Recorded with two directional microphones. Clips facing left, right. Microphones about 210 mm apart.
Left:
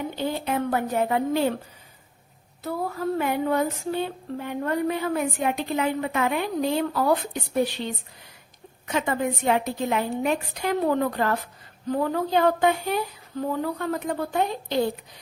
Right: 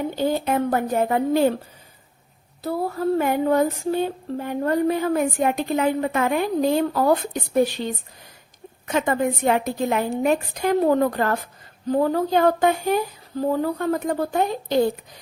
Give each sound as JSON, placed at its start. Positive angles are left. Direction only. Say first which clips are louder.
{"t": 0.2, "sound": "speech", "louder": "right 5 dB", "side_deg": -45}
{"t": 2.6, "sound": "a woman's voice", "louder": "right 4 dB", "side_deg": -35}